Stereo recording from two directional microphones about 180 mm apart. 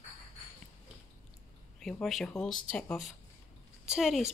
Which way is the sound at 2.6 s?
5° left (ahead or behind).